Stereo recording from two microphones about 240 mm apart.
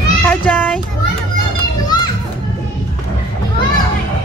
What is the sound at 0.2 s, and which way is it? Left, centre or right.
Child singing, centre.